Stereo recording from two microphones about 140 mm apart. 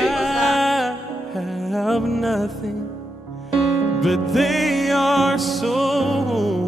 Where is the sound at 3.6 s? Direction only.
Centre (ahead or behind).